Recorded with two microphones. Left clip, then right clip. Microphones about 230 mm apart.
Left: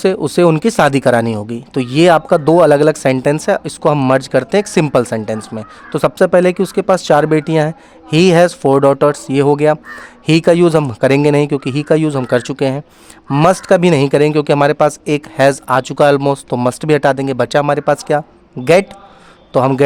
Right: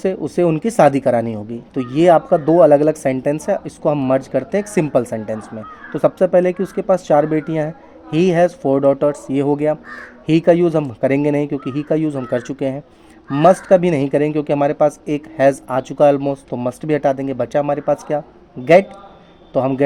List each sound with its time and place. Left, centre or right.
0.0 s speech: left